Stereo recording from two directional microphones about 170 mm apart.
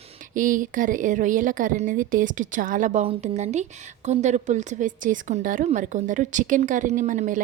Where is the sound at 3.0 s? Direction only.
40° right (ahead or behind).